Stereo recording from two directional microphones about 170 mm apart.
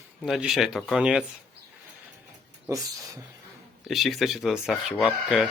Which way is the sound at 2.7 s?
20° right (ahead or behind).